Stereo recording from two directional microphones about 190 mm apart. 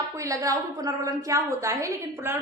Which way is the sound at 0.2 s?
15° right (ahead or behind).